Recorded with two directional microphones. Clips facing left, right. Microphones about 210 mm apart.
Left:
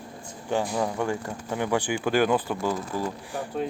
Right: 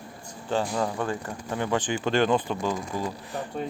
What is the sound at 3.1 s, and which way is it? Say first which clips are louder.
Speech: left 1 dB; 15° left (ahead or behind).